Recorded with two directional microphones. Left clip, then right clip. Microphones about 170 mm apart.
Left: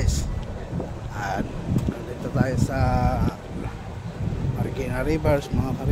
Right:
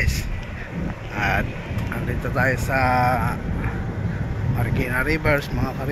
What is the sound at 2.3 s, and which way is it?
Speech, 5° left (ahead or behind).